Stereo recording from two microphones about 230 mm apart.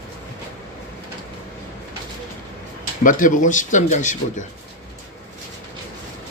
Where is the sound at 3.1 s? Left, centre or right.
Left.